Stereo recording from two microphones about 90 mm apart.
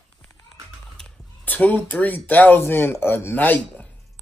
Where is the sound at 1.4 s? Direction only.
15° left (ahead or behind).